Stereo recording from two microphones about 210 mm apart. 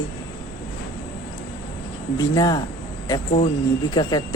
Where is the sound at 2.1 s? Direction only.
20° left (ahead or behind).